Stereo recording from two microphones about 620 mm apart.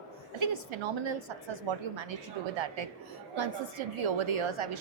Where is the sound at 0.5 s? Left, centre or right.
Right.